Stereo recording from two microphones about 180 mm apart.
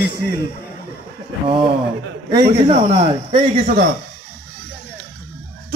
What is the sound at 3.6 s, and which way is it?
Speech, 55° right (ahead or behind).